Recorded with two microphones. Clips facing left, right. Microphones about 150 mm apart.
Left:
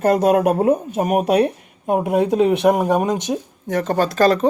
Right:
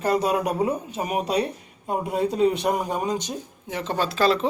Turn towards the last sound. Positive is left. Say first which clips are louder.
# left 6 dB
turn(degrees=45)  # may be behind; listen again after turning